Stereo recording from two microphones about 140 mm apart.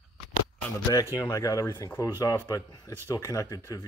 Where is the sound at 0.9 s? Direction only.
20° left (ahead or behind).